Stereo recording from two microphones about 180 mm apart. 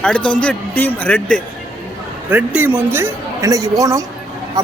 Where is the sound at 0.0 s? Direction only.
5° left (ahead or behind).